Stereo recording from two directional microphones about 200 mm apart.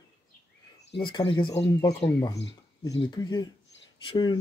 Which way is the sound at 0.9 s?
25° left (ahead or behind).